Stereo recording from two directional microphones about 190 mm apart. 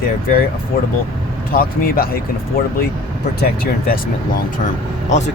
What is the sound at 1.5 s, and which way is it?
Speech, 50° left (ahead or behind).